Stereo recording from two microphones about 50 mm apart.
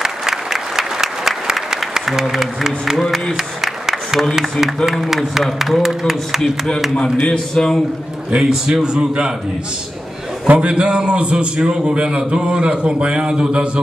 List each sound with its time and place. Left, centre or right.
0.2 s applause: centre
4.4 s a man's voice: centre
7.2 s a man's voice: centre
8.5 s a man's voice: centre
10.4 s a man's voice: right